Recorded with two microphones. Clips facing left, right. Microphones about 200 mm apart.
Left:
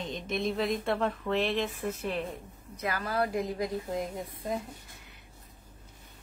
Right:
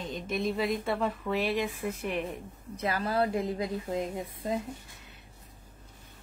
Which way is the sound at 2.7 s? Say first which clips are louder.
Right 2 dB; 30° right (ahead or behind).